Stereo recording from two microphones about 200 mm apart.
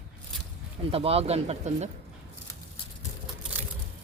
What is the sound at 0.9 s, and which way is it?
Speech, 30° right (ahead or behind).